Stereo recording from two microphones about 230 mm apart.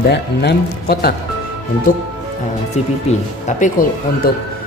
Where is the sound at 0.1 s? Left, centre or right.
Left.